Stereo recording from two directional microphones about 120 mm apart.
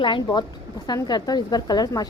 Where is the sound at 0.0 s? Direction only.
45° left (ahead or behind).